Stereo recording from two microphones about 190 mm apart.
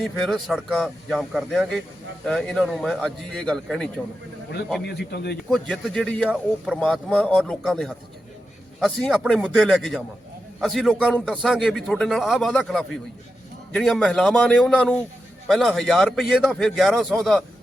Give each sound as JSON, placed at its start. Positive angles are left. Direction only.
{"t": 0.0, "sound": "speech", "side_deg": 0}
{"t": 4.9, "sound": "a man's voice", "side_deg": 60}
{"t": 5.5, "sound": "speech", "side_deg": 5}